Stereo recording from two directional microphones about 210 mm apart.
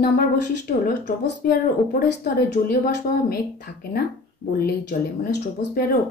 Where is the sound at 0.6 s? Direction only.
45° left (ahead or behind).